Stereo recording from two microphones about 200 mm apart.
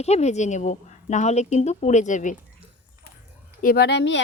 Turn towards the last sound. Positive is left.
turn(degrees=60)  # may be behind; listen again after turning